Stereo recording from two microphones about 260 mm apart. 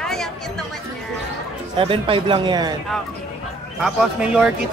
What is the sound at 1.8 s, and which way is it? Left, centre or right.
Speech, centre.